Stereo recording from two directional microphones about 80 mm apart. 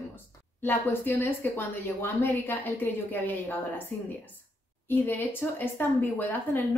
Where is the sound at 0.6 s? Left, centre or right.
Left.